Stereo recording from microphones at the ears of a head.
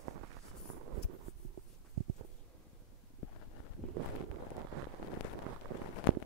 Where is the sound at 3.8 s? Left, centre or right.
Right.